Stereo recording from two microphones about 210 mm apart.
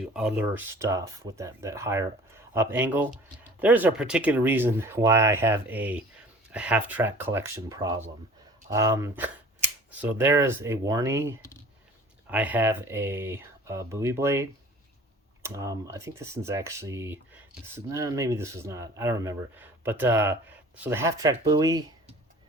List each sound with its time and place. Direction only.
0.0 s speech: 5° right (ahead or behind)
15.4 s speech: 15° right (ahead or behind)